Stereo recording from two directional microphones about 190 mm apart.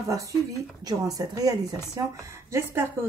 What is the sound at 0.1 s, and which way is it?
A woman's voice, 15° right (ahead or behind).